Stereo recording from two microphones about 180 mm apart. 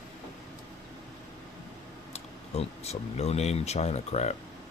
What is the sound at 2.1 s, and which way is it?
Speech, 35° left (ahead or behind).